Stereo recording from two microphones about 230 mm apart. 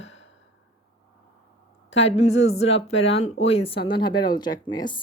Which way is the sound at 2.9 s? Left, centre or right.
Left.